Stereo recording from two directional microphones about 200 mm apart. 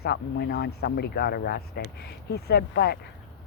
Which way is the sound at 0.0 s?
55° left (ahead or behind).